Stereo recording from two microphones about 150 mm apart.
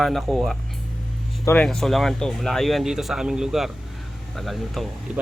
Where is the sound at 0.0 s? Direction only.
Centre (ahead or behind).